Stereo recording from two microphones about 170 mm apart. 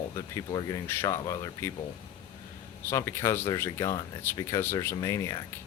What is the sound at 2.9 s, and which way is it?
A man's voice, 15° left (ahead or behind).